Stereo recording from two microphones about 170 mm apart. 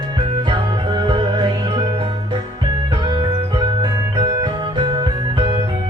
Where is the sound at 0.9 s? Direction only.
25° right (ahead or behind).